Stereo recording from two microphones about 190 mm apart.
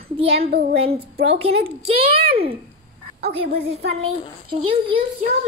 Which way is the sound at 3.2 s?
30° right (ahead or behind).